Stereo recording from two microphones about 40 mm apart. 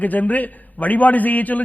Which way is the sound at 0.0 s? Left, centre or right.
Left.